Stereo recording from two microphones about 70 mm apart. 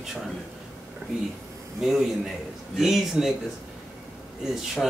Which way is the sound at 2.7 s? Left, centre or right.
Centre.